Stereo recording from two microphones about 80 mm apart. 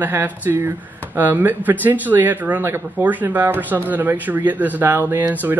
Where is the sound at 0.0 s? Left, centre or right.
Right.